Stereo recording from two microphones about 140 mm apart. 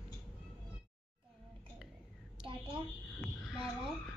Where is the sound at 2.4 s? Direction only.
5° right (ahead or behind).